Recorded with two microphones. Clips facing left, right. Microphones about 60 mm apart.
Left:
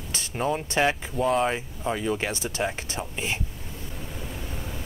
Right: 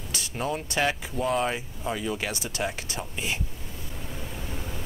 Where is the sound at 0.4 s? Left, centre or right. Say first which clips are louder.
Left 3 dB; centre.